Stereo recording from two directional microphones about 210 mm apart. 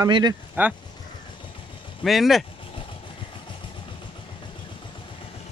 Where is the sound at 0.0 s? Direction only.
20° right (ahead or behind).